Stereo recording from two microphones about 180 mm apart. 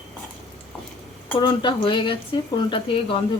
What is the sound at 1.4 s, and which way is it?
Speech, 25° left (ahead or behind).